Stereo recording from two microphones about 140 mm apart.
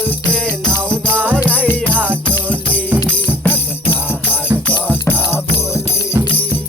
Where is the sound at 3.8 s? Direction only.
15° left (ahead or behind).